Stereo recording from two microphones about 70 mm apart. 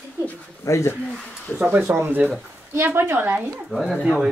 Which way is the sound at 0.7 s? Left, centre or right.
Left.